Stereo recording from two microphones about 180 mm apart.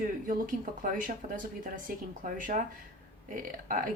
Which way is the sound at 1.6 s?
50° right (ahead or behind).